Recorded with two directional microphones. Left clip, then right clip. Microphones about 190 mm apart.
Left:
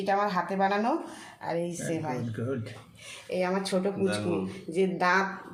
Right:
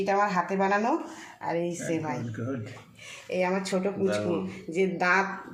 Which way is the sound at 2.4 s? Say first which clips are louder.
Left 2 dB; 55° left (ahead or behind).